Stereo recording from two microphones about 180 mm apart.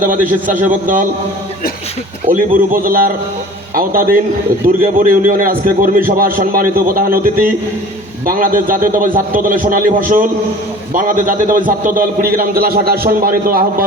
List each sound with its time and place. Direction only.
0.4 s a man's voice: 45° right (ahead or behind)
2.2 s a man's voice: 50° right (ahead or behind)